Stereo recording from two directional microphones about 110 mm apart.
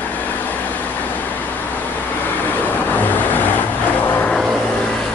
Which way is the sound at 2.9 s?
15° left (ahead or behind).